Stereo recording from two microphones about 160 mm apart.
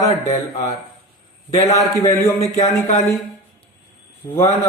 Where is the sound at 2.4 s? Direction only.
40° left (ahead or behind).